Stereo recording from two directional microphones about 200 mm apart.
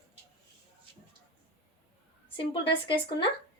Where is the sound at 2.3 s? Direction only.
25° left (ahead or behind).